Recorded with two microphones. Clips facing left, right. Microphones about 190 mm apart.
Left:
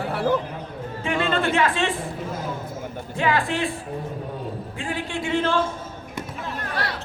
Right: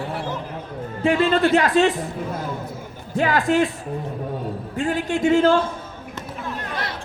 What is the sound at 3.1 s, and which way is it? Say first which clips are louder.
Speech: right 5 dB; 40° right (ahead or behind).